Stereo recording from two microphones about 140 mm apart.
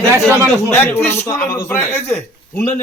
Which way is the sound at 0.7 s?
15° left (ahead or behind).